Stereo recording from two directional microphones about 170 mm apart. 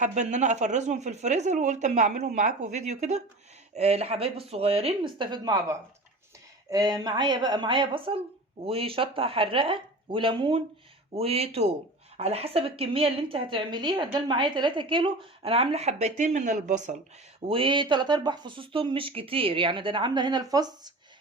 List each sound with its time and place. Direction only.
0.0 s a woman's voice: 45° right (ahead or behind)
17.5 s speech: 30° right (ahead or behind)